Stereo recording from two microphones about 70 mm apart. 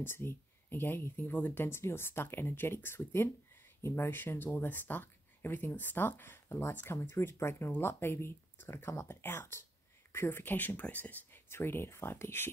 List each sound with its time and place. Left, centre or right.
0.0 s speech: left